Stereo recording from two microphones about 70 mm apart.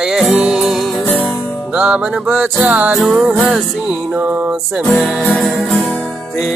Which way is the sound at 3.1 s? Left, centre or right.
Centre.